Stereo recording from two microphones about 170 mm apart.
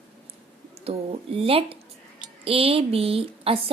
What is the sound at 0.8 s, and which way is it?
A woman's voice, 35° right (ahead or behind).